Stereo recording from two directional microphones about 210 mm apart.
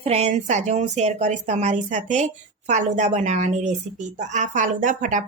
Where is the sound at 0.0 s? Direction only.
30° right (ahead or behind).